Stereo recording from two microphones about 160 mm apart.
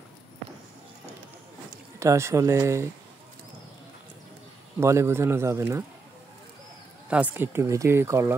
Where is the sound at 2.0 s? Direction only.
20° right (ahead or behind).